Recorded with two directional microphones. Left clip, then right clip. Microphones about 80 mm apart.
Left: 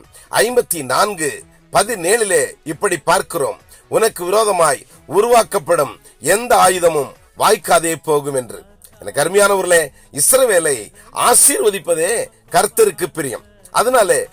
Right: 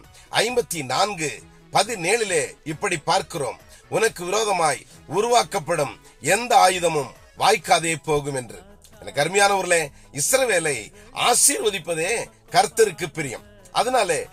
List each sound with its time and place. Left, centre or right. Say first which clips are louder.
0.3 s a man's voice: left 7 dB; left
5.0 s a man's voice: left 8 dB; left
5.3 s a man's voice: left 6 dB; left
9.0 s a man's voice: left 5 dB; left
11.1 s speech: left 6 dB; left